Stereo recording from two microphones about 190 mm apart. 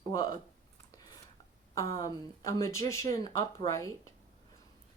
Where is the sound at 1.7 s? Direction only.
15° left (ahead or behind).